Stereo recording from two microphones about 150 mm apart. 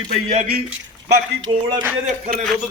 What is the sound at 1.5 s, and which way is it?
Speech, 30° right (ahead or behind).